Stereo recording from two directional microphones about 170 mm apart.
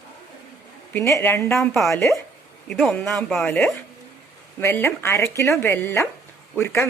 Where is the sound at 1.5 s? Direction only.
Centre (ahead or behind).